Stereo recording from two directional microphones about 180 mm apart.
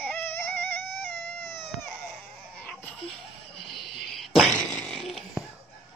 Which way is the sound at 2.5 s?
5° left (ahead or behind).